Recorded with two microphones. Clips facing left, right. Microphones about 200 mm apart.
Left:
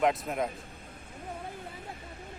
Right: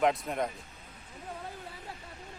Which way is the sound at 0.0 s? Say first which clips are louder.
Even; centre (ahead or behind).